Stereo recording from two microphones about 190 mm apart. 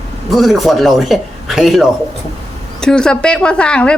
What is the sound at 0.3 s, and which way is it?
A woman's voice, centre (ahead or behind).